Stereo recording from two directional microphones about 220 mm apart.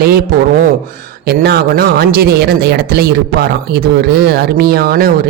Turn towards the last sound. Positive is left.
turn(degrees=-45)  # may be behind; listen again after turning